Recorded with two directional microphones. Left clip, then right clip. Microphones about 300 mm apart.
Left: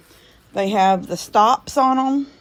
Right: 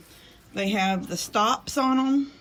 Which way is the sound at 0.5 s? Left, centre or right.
Centre.